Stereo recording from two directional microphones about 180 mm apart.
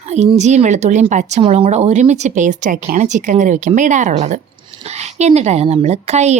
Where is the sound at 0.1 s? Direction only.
40° right (ahead or behind).